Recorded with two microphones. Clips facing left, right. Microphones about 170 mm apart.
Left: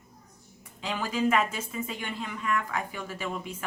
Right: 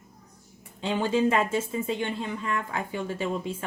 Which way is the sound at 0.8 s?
25° right (ahead or behind).